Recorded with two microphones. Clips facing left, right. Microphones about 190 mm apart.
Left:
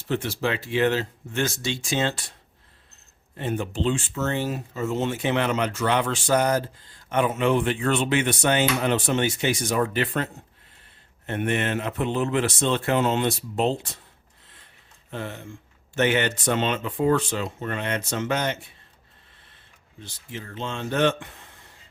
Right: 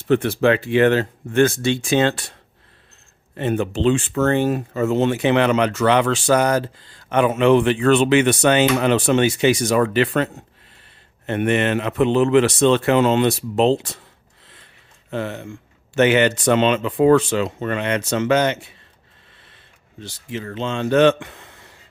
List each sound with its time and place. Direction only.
0.1 s speech: 60° right (ahead or behind)
3.3 s speech: 75° right (ahead or behind)
15.1 s speech: 90° right